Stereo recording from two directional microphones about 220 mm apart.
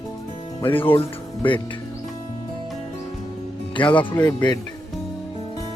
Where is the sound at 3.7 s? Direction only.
20° left (ahead or behind).